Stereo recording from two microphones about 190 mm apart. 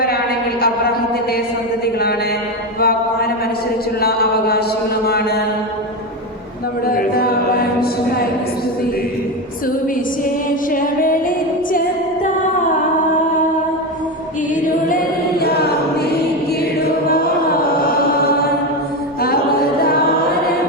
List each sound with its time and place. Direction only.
0.6 s a sound: 55° left (ahead or behind)
2.8 s music: 55° left (ahead or behind)
4.0 s a sound: 55° left (ahead or behind)
5.0 s mantra: 55° left (ahead or behind)
6.8 s chant: 50° left (ahead or behind)
10.2 s music: 45° left (ahead or behind)
14.5 s choir: 45° left (ahead or behind)
17.1 s chant: 50° left (ahead or behind)